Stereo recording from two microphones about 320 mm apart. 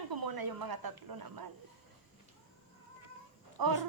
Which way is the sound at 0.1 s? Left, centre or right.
Right.